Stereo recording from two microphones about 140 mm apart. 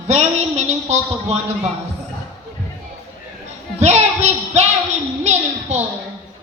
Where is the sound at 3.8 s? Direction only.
50° right (ahead or behind).